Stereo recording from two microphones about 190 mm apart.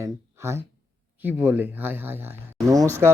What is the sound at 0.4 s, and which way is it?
Speech, 15° right (ahead or behind).